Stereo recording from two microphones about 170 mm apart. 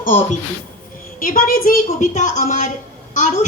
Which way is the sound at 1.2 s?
55° left (ahead or behind).